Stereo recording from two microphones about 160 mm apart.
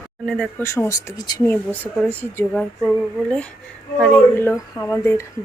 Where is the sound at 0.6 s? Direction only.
15° left (ahead or behind).